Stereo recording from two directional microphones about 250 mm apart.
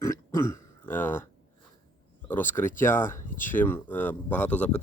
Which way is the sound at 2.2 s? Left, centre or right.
Centre.